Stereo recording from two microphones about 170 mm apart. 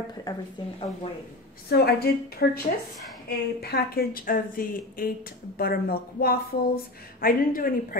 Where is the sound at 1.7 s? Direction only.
70° left (ahead or behind).